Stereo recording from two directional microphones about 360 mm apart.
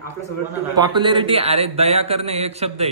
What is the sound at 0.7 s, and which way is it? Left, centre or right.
A man's voice, centre.